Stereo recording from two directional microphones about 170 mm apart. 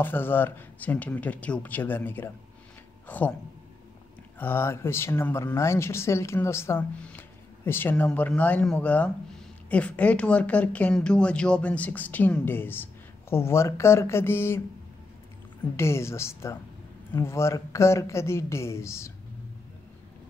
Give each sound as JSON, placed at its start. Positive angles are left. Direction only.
{"t": 0.0, "sound": "speech", "side_deg": 10}
{"t": 4.4, "sound": "speech", "side_deg": 15}
{"t": 15.7, "sound": "speech", "side_deg": 15}